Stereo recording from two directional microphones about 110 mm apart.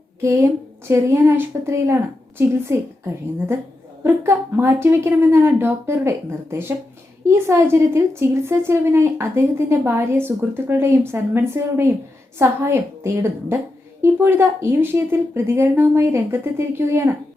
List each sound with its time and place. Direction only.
0.2 s a woman's voice: 25° right (ahead or behind)
4.0 s a woman's voice: 20° right (ahead or behind)